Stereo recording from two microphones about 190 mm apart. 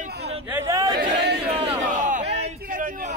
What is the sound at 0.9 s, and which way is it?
Chatter, 60° right (ahead or behind).